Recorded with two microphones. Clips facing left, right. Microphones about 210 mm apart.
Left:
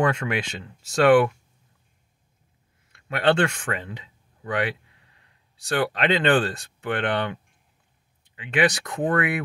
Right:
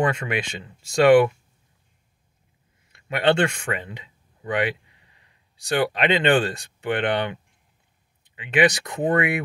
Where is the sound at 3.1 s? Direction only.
10° right (ahead or behind).